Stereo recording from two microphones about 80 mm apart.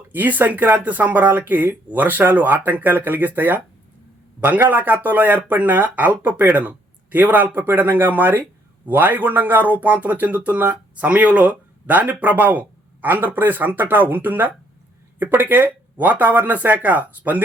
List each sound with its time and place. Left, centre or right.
0.1 s speech: right